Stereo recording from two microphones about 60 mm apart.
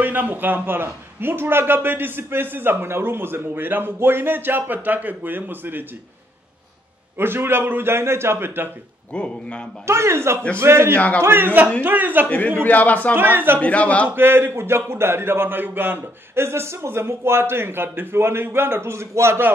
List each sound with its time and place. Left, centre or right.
0.0 s a man's voice: right
7.2 s a man's voice: right
9.1 s speech: centre
9.8 s a man's voice: right
12.3 s speech: left
13.1 s a man's voice: right
13.6 s speech: left
14.1 s a man's voice: right